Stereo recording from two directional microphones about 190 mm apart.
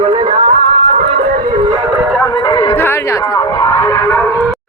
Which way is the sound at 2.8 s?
10° left (ahead or behind).